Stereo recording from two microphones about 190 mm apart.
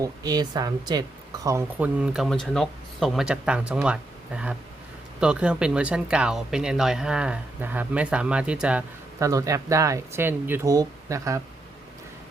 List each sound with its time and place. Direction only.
0.0 s speech: 20° right (ahead or behind)
9.2 s speech: 15° right (ahead or behind)